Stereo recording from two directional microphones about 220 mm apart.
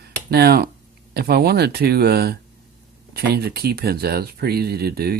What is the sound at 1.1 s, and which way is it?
Speech, 45° right (ahead or behind).